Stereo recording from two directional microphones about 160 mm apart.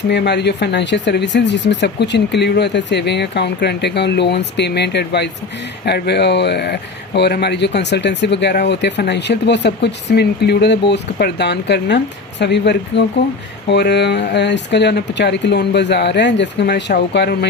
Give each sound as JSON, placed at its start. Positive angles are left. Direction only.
{"t": 0.1, "sound": "speech", "side_deg": 90}